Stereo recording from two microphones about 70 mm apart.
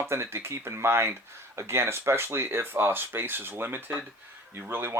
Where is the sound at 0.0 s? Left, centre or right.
Right.